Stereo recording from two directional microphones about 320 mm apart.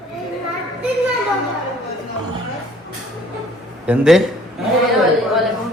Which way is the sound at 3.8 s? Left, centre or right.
Centre.